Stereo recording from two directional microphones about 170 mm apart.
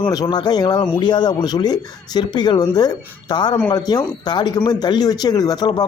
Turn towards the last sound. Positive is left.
turn(degrees=25)  # may be behind; listen again after turning